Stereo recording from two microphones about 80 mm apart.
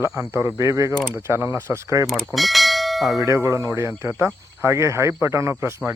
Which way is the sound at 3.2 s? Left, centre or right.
Right.